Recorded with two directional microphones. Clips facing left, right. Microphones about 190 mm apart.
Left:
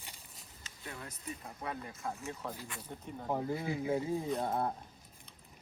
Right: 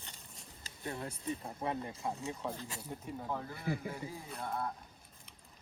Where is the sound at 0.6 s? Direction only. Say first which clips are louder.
Right 6 dB; 30° right (ahead or behind); by 3.2 s 5° right (ahead or behind).